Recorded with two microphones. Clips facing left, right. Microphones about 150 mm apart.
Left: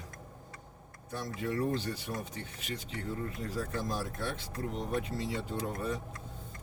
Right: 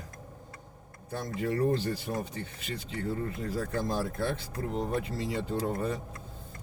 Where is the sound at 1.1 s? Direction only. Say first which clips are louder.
Right 4 dB; 35° right (ahead or behind).